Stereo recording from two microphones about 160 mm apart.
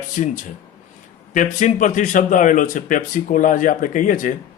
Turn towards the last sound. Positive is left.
turn(degrees=55)  # may be behind; listen again after turning